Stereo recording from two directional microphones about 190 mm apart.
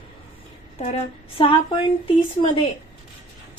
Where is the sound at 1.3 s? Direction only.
25° left (ahead or behind).